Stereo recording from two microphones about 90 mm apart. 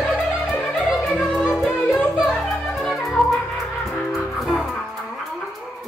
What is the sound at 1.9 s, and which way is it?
Music, 20° left (ahead or behind).